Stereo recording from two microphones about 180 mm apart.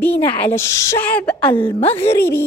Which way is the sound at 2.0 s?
15° left (ahead or behind).